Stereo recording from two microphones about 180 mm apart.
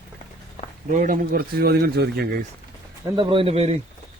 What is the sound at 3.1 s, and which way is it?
Speech, 30° right (ahead or behind).